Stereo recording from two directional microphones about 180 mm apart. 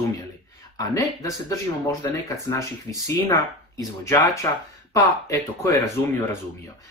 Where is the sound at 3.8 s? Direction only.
20° left (ahead or behind).